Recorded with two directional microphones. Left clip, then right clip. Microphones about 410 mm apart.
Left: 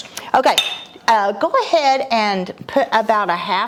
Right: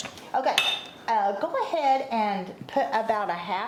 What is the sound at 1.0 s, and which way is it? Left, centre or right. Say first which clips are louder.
A woman's voice: left 10 dB; left.